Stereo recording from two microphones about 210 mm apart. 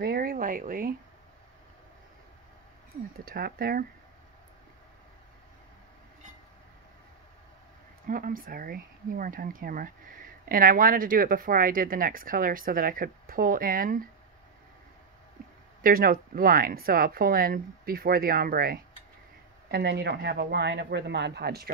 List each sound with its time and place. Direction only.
0.0 s a sound: 45° right (ahead or behind)
3.3 s speech: 45° right (ahead or behind)
8.1 s speech: 40° right (ahead or behind)
15.8 s speech: 40° right (ahead or behind)